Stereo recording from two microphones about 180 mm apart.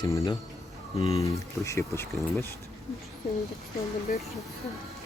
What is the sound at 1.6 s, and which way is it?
Speech, 15° left (ahead or behind).